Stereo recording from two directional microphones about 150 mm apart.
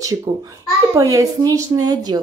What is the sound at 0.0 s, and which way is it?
A child's voice, 20° right (ahead or behind).